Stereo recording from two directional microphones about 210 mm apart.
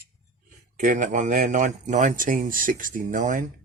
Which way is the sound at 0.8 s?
35° right (ahead or behind).